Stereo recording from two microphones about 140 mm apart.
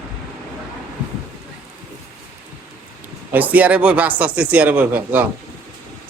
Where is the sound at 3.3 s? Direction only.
10° right (ahead or behind).